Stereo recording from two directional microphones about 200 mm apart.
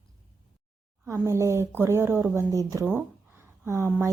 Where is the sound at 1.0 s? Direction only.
15° right (ahead or behind).